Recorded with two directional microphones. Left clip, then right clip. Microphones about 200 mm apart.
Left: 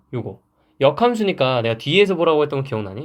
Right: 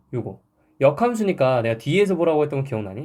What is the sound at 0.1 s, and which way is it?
Speech, 25° left (ahead or behind).